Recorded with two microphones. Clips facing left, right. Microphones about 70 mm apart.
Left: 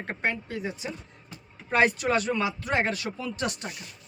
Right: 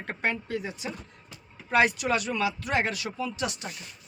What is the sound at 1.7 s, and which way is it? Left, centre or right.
Speech, left.